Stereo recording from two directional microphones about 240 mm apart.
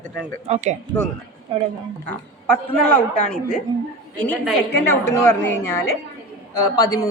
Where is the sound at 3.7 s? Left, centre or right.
Centre.